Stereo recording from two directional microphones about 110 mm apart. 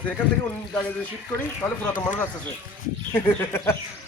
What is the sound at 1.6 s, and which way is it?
Speech, 20° left (ahead or behind).